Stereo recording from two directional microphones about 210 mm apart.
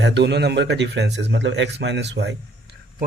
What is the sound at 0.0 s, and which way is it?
A man's voice, 55° right (ahead or behind).